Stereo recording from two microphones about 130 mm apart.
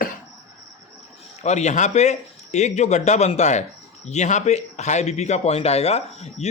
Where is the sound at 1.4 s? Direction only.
60° left (ahead or behind).